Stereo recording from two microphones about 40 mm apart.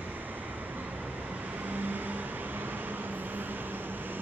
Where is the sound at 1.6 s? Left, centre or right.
Right.